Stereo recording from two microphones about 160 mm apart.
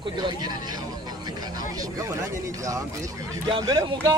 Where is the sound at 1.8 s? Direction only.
20° right (ahead or behind).